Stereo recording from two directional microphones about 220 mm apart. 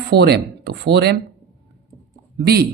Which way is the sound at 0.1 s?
45° right (ahead or behind).